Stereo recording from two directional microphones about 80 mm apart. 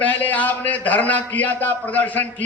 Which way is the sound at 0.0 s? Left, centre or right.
Left.